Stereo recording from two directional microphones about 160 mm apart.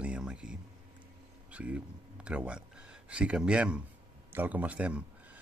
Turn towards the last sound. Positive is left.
turn(degrees=-10)  # may be behind; listen again after turning